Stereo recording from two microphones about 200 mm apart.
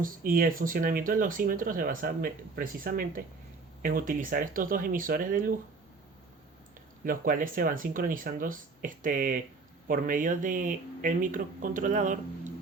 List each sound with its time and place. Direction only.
0.0 s speech: 45° right (ahead or behind)
7.0 s speech: 45° right (ahead or behind)